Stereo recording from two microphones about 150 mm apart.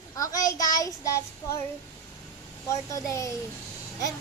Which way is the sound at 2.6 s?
20° left (ahead or behind).